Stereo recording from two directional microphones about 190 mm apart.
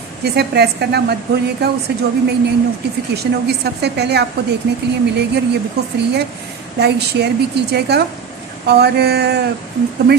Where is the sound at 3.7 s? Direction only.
60° right (ahead or behind).